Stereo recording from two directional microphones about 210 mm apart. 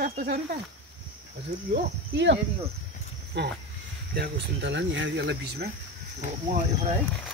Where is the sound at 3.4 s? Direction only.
55° right (ahead or behind).